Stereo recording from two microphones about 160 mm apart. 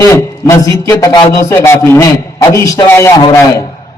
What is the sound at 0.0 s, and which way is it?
A man's voice, 15° left (ahead or behind).